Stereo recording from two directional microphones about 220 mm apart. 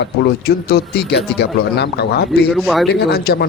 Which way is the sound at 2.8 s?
45° left (ahead or behind).